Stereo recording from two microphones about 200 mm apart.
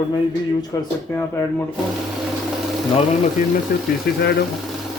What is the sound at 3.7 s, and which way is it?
Speech, 50° left (ahead or behind).